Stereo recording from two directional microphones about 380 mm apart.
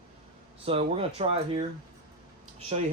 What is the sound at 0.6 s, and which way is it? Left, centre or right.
Speech, centre.